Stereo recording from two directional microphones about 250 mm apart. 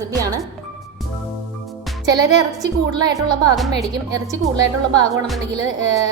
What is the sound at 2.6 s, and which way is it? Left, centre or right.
Speech, centre.